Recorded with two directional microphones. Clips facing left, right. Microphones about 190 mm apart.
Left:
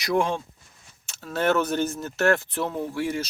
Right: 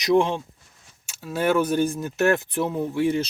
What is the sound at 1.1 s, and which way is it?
Speech, 10° right (ahead or behind).